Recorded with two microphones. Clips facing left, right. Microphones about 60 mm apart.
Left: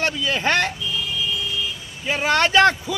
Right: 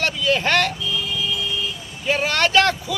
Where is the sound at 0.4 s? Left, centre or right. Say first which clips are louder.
Left 2 dB; left.